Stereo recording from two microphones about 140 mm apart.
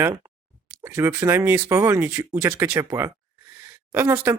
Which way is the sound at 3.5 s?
20° right (ahead or behind).